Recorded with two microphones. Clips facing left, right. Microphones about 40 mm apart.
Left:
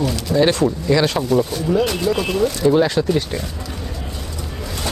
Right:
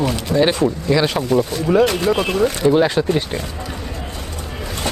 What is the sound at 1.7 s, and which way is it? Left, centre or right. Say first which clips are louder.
Speech: right 6 dB; right.